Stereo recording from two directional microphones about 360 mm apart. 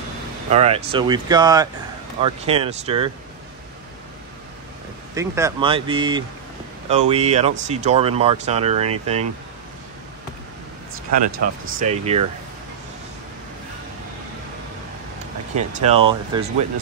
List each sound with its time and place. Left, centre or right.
0.5 s speech: centre
5.1 s speech: centre
11.1 s speech: right
15.5 s speech: centre